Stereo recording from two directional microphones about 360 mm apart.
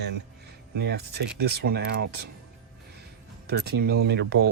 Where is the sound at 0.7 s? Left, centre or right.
Right.